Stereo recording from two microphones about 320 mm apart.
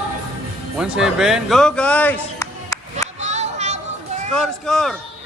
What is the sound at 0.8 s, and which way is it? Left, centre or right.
Speech, centre.